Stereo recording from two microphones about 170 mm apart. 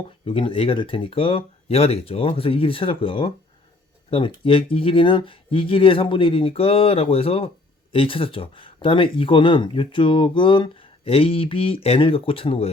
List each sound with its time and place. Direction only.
0.3 s speech: 30° left (ahead or behind)